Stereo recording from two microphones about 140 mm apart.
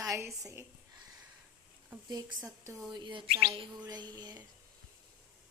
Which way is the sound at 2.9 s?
35° right (ahead or behind).